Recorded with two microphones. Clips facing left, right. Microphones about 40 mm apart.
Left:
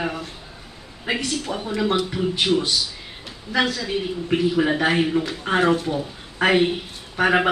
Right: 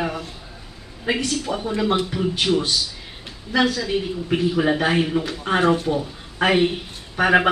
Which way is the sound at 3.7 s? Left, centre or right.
Centre.